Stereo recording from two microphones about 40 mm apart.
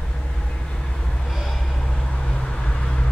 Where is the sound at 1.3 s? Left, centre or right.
Centre.